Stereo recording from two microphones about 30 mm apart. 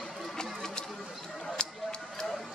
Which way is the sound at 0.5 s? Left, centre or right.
Centre.